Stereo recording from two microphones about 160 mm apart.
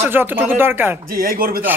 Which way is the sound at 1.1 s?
65° right (ahead or behind).